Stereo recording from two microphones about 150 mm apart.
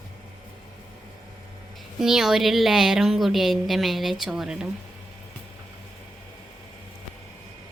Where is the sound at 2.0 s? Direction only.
5° right (ahead or behind).